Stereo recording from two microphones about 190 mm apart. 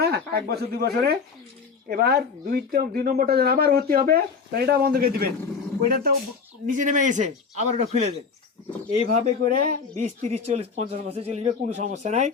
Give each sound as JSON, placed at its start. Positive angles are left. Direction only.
{"t": 0.0, "sound": "speech", "side_deg": -55}
{"t": 6.7, "sound": "speech", "side_deg": -40}